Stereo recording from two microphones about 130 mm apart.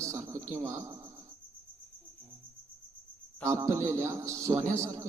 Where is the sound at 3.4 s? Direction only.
25° right (ahead or behind).